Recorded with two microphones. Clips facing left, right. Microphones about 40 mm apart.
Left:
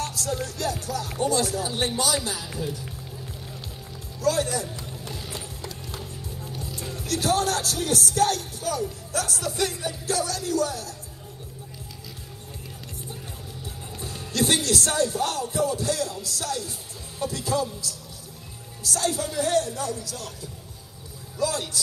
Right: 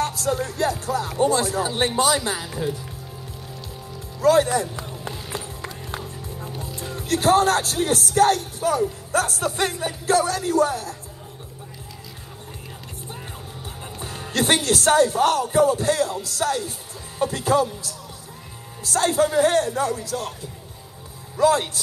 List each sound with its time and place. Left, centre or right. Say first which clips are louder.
0.0 s speech: right 6 dB; right
4.2 s a man's voice: right 7 dB; right
5.3 s music: right 4 dB; right
6.5 s speech: right 2 dB; right
13.9 s speech: right 2 dB; right
21.4 s speech: right 8 dB; right